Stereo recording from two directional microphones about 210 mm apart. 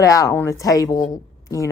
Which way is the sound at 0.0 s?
15° left (ahead or behind).